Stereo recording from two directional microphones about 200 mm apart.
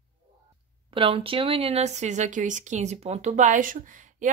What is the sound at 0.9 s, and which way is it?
Speech, 25° right (ahead or behind).